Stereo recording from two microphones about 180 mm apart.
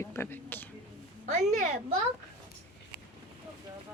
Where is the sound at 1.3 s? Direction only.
40° right (ahead or behind).